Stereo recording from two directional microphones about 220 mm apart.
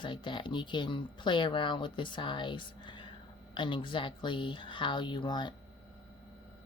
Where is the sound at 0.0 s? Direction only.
20° left (ahead or behind).